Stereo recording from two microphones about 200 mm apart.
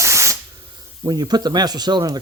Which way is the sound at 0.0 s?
15° right (ahead or behind).